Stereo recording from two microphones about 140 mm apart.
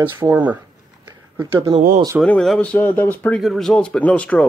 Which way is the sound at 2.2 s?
5° left (ahead or behind).